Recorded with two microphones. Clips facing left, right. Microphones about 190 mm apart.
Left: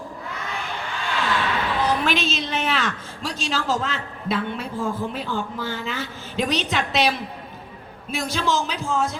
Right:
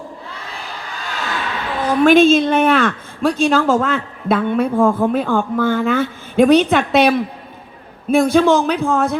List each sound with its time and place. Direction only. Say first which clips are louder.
0.3 s crowd: left 1 dB; 35° right (ahead or behind)
1.8 s a woman's voice: right 14 dB; 50° right (ahead or behind)